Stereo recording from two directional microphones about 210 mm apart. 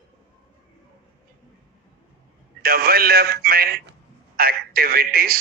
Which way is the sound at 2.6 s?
45° right (ahead or behind).